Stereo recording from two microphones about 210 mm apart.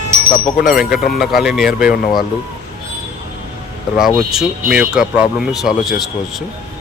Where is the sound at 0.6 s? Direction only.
45° left (ahead or behind).